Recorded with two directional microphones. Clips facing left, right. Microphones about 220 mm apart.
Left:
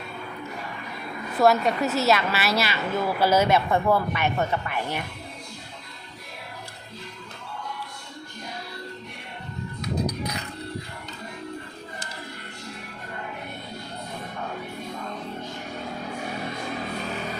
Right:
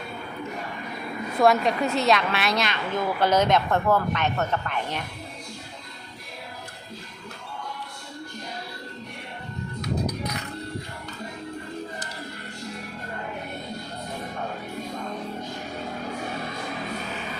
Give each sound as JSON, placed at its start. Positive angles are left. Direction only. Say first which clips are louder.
{"t": 1.4, "sound": "a woman's voice", "louder": "even", "side_deg": 0}